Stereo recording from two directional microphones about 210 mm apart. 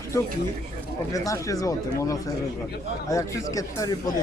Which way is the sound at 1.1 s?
15° left (ahead or behind).